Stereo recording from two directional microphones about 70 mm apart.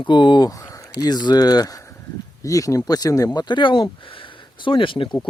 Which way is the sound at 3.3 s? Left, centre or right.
Left.